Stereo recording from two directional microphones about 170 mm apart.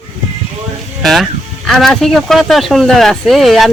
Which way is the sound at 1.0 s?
Centre (ahead or behind).